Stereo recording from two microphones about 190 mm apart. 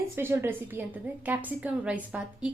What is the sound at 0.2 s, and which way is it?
A woman's voice, 10° right (ahead or behind).